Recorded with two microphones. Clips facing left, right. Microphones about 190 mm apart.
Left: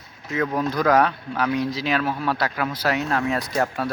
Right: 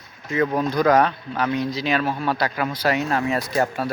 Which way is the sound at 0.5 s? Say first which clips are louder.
Right 1 dB; centre (ahead or behind).